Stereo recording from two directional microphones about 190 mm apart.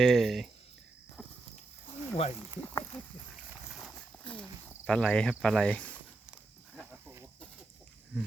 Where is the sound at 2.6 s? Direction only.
10° left (ahead or behind).